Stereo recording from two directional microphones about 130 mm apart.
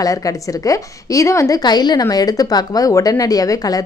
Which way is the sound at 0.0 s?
25° left (ahead or behind).